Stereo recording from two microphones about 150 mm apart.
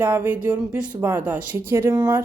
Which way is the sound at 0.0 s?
10° right (ahead or behind).